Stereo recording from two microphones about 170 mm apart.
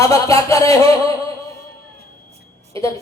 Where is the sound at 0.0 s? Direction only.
20° left (ahead or behind).